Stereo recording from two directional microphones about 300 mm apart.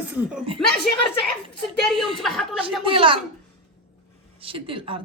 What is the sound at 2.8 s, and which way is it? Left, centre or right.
Speech, centre.